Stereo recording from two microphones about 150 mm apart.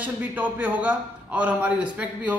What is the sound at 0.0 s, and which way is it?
A man's voice, 10° right (ahead or behind).